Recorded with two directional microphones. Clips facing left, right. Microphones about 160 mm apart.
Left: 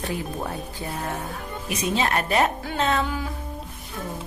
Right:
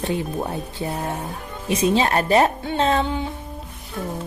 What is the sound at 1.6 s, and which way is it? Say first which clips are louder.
Speech: right 6 dB; 30° right (ahead or behind).